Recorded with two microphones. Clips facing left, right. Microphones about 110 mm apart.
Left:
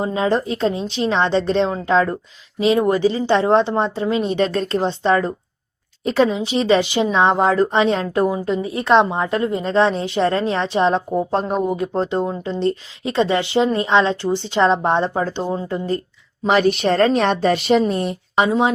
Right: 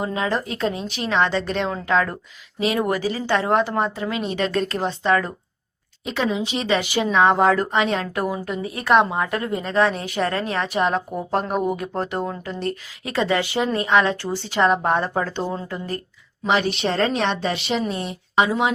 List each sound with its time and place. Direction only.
0.0 s a woman's voice: 30° left (ahead or behind)
16.5 s a woman's voice: 45° left (ahead or behind)
18.4 s a woman's voice: 30° left (ahead or behind)